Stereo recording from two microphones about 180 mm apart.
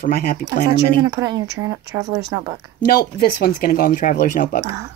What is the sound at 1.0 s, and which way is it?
Speech, 20° right (ahead or behind).